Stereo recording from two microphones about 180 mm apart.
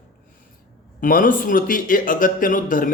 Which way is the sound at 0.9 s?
50° left (ahead or behind).